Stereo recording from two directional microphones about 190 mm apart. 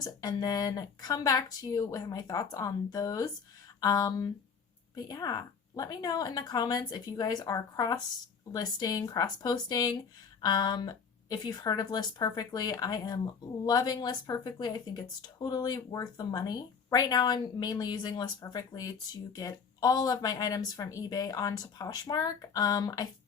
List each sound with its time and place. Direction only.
0.0 s speech: 20° left (ahead or behind)